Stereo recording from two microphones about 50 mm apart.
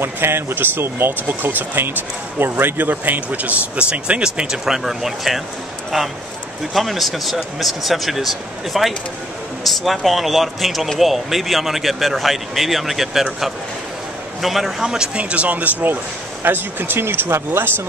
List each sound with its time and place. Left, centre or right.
0.0 s speech: right
2.8 s speech: right; by 14.7 s centre
14.8 s speech: centre; by 15.7 s right
16.4 s speech: right